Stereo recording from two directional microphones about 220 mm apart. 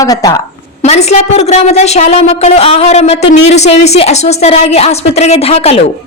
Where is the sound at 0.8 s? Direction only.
30° left (ahead or behind).